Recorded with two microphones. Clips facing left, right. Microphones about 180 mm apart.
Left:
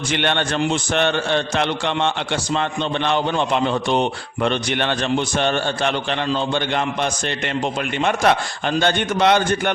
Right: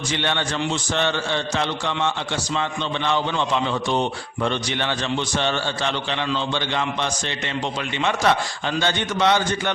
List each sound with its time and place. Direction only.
0.1 s a man's voice: 60° left (ahead or behind)